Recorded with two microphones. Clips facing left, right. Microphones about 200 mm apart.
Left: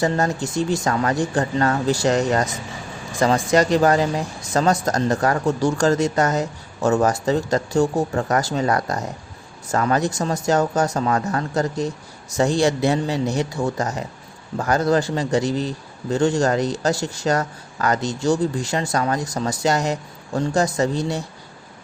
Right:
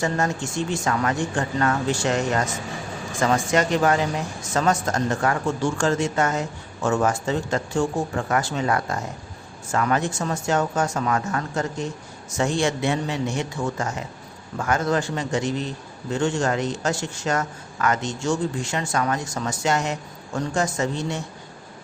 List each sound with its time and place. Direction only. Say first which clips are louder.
0.0 s speech: left 3 dB; 35° left (ahead or behind)